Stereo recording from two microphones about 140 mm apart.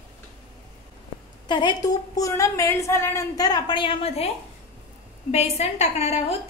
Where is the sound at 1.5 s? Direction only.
30° left (ahead or behind).